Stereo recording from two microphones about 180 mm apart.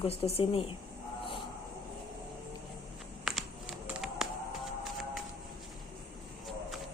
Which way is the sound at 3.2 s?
Centre (ahead or behind).